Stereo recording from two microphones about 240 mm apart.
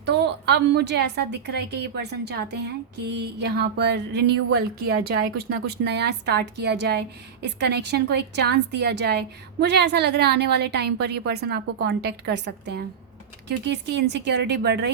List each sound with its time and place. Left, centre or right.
0.0 s a woman's voice: right